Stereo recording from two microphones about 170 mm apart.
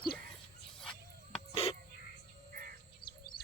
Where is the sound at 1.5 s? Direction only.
35° left (ahead or behind).